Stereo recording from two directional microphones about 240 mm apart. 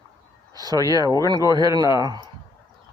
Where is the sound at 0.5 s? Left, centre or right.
Centre.